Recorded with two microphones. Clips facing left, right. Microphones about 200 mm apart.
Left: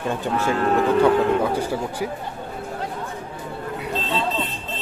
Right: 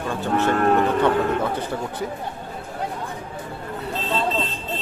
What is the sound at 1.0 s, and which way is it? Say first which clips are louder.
Speech: left 3 dB; 10° left (ahead or behind).